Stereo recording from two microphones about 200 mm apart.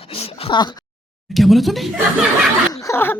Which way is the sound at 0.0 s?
30° left (ahead or behind).